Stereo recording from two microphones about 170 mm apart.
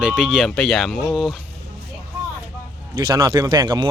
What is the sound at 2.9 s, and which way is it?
Speech, 25° right (ahead or behind).